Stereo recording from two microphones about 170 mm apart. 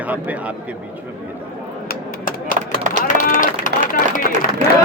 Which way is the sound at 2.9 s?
50° left (ahead or behind).